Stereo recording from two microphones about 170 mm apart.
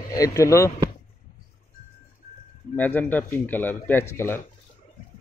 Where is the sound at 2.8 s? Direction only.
10° left (ahead or behind).